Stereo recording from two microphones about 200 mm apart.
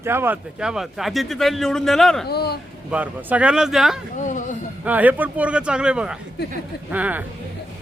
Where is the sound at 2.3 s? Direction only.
50° left (ahead or behind).